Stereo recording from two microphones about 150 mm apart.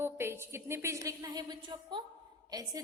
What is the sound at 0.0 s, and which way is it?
A woman's voice, 15° right (ahead or behind).